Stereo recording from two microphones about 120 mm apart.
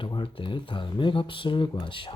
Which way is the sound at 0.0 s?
45° left (ahead or behind).